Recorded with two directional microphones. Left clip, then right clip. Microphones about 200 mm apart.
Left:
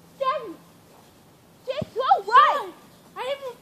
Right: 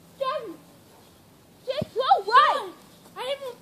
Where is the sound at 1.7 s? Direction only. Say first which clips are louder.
Even; 25° right (ahead or behind).